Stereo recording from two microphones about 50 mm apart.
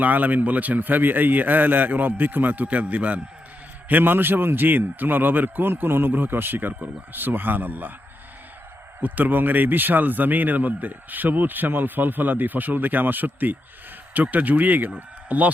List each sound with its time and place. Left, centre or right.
0.0 s speech: right
3.8 s a man's voice: right
9.0 s speech: right